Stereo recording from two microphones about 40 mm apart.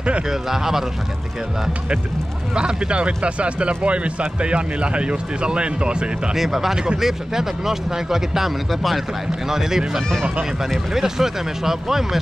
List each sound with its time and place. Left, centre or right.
0.3 s speech: centre
2.5 s speech: right
6.3 s speech: centre